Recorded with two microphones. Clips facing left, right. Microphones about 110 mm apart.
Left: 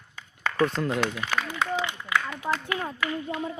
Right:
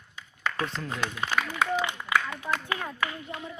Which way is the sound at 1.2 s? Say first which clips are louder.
Even; 30° right (ahead or behind).